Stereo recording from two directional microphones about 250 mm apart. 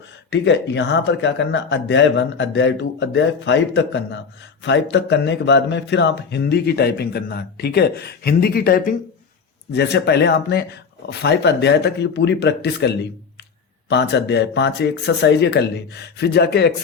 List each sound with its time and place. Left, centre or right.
0.3 s speech: left